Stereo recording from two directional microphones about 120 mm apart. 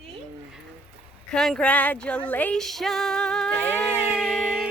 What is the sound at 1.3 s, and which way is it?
Speech, 5° left (ahead or behind).